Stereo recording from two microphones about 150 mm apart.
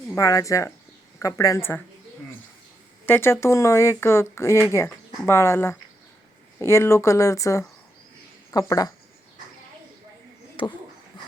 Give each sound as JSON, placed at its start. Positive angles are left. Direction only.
{"t": 0.1, "sound": "speech", "side_deg": 20}
{"t": 3.1, "sound": "speech", "side_deg": 15}
{"t": 10.6, "sound": "speech", "side_deg": 35}
{"t": 11.1, "sound": "dog", "side_deg": 30}